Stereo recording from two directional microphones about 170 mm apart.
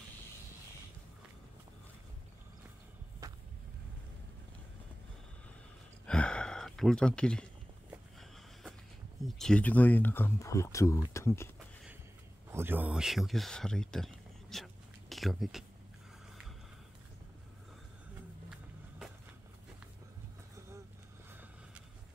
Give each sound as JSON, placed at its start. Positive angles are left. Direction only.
{"t": 3.2, "sound": "vehicle", "side_deg": -20}
{"t": 6.0, "sound": "gasp", "side_deg": 5}
{"t": 9.4, "sound": "speech", "side_deg": 5}
{"t": 12.4, "sound": "speech", "side_deg": -15}
{"t": 18.5, "sound": "music", "side_deg": -5}